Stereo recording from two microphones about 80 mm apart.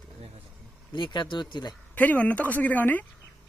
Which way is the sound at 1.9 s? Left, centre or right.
Centre.